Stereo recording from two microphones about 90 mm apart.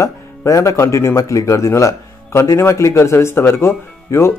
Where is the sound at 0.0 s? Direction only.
35° left (ahead or behind).